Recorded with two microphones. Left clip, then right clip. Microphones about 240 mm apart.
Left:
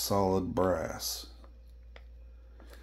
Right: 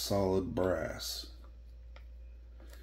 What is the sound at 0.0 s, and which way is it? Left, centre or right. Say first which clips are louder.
Speech: left 3 dB; left.